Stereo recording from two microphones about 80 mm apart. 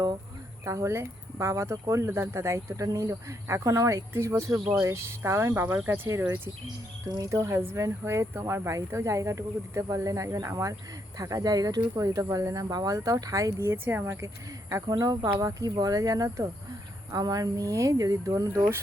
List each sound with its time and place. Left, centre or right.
0.6 s speech: right
5.6 s speech: right
7.2 s speech: right
13.6 s speech: right
14.8 s speech: right